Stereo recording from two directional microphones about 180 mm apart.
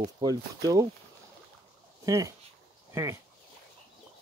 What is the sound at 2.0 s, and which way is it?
Speech, 15° right (ahead or behind).